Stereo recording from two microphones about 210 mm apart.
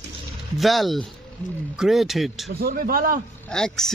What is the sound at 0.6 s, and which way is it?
Speech, centre (ahead or behind).